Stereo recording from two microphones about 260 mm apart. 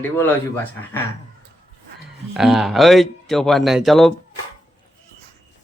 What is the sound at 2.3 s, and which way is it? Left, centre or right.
Speech, centre.